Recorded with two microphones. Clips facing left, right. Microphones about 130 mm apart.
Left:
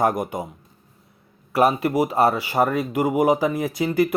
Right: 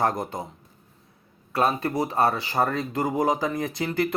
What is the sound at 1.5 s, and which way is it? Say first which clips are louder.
Speech: left 5 dB; 20° left (ahead or behind).